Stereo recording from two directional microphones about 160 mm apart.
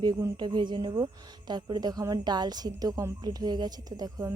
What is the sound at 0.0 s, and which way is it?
A woman's voice, 20° right (ahead or behind).